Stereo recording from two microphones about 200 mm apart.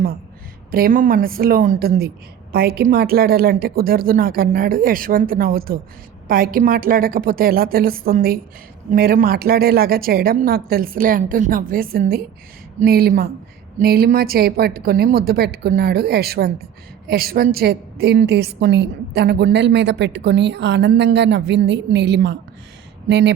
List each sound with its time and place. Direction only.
0.7 s a woman's voice: 45° right (ahead or behind)